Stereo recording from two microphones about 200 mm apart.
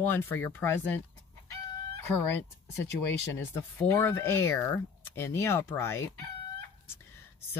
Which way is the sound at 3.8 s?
10° left (ahead or behind).